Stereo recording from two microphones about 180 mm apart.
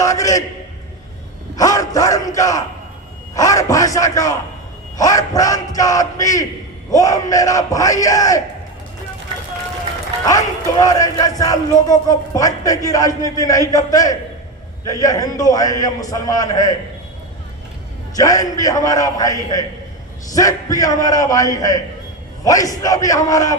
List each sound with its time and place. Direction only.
0.0 s a sound: 20° left (ahead or behind)
1.5 s battle cry: 20° left (ahead or behind)
3.3 s a sound: 20° left (ahead or behind)
4.9 s speech: 20° left (ahead or behind)
10.2 s speech: 20° left (ahead or behind)
18.2 s speech: 20° left (ahead or behind)